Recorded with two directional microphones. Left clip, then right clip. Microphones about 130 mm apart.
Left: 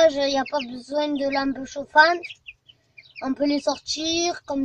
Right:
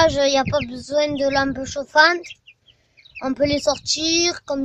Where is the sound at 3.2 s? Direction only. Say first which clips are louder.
Right 4 dB; 25° right (ahead or behind).